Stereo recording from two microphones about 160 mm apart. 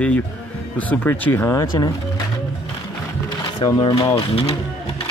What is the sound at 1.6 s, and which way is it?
Speech, 25° left (ahead or behind).